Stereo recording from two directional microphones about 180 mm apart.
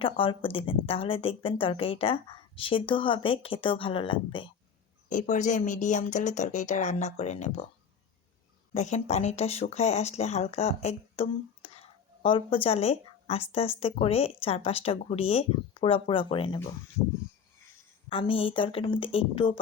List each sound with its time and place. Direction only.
0.0 s a woman's voice: 30° left (ahead or behind)
5.3 s speech: 40° left (ahead or behind)
8.7 s speech: 40° left (ahead or behind)
18.1 s a woman's voice: 30° left (ahead or behind)